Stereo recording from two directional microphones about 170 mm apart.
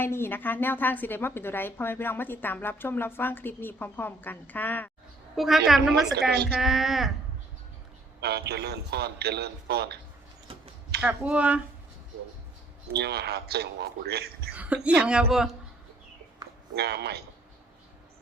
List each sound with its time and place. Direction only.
0.0 s a woman's voice: 15° left (ahead or behind)
5.4 s a woman's voice: centre (ahead or behind)
8.2 s a man's voice: 75° right (ahead or behind)
11.0 s speech: 5° right (ahead or behind)
12.9 s a man's voice: 70° right (ahead or behind)
14.5 s a woman's voice: 10° right (ahead or behind)
16.7 s a man's voice: 75° right (ahead or behind)